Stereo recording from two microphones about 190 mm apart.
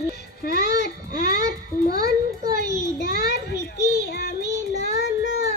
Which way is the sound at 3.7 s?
55° left (ahead or behind).